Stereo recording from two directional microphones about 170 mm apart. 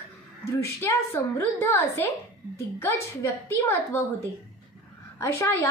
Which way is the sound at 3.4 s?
15° left (ahead or behind).